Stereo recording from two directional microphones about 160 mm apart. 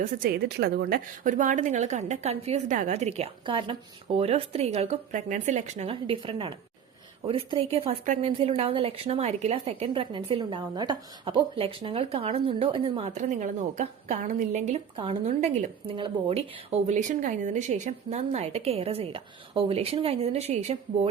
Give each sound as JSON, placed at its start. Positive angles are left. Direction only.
{"t": 0.0, "sound": "a woman's voice", "side_deg": -65}
{"t": 13.1, "sound": "a woman's voice", "side_deg": -50}
{"t": 16.0, "sound": "speech", "side_deg": -35}